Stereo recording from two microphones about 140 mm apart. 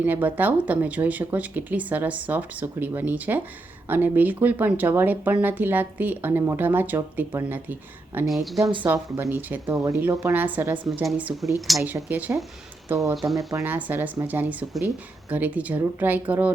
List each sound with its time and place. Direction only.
0.0 s speech: 10° right (ahead or behind)
8.3 s a woman's voice: centre (ahead or behind)
8.8 s speech: 15° right (ahead or behind)
13.2 s a woman's voice: centre (ahead or behind)
13.5 s speech: 15° right (ahead or behind)